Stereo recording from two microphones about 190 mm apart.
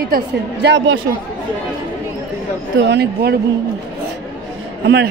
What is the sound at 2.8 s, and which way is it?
Speech, 60° right (ahead or behind).